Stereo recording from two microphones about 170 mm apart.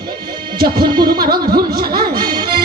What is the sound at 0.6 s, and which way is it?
Music, 65° right (ahead or behind).